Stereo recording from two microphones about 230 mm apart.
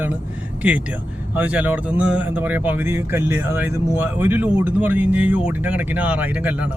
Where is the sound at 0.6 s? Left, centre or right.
Centre.